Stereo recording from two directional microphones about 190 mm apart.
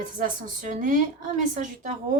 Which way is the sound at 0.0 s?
45° right (ahead or behind).